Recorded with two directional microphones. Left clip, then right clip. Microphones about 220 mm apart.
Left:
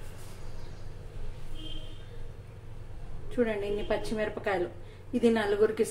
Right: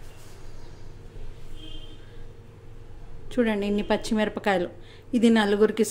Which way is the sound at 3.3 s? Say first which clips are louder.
Right 4 dB; 45° right (ahead or behind).